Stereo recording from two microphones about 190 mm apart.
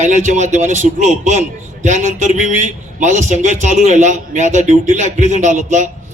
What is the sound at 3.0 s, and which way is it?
A man's voice, 40° right (ahead or behind).